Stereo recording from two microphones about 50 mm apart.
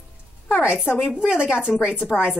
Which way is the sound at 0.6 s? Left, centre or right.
Right.